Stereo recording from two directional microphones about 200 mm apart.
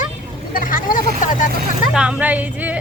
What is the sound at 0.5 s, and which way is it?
Vehicle, 45° left (ahead or behind).